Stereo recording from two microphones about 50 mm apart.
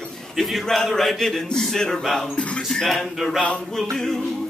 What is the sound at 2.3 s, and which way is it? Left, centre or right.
Music, left.